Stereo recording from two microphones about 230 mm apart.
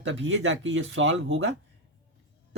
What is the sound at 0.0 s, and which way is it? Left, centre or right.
Speech, right.